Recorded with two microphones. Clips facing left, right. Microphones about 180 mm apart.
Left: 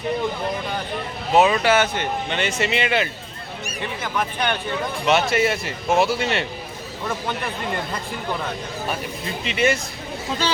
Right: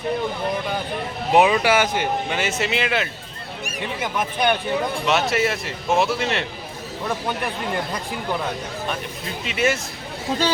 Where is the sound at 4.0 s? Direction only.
15° right (ahead or behind).